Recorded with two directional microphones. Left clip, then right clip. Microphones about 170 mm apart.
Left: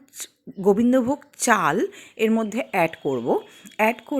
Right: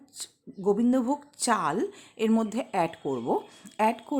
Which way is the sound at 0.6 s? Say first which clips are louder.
Left 6 dB; 25° left (ahead or behind).